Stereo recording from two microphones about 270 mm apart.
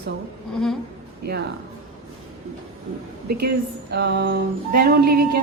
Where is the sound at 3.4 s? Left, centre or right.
Right.